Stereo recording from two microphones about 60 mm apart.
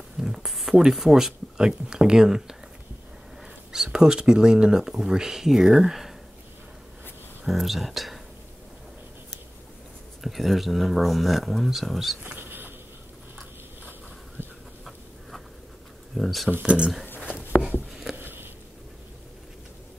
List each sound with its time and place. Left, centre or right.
0.2 s speech: centre
3.7 s speech: centre
7.4 s speech: centre
10.2 s speech: centre
12.2 s insect: right
16.2 s speech: centre
16.6 s speech: centre
17.2 s a sound: centre
18.1 s a sound: right